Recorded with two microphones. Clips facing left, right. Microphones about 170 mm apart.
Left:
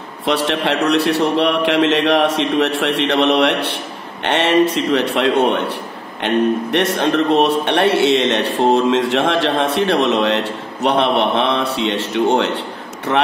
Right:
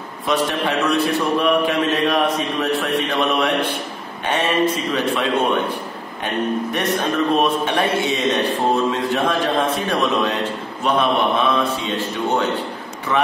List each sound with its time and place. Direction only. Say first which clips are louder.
0.2 s a man's voice: left 2 dB; 80° left